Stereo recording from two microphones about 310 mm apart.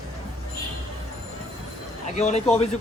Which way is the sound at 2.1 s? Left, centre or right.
Left.